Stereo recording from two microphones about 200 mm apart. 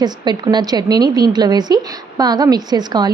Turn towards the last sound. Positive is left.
turn(degrees=-20)  # may be behind; listen again after turning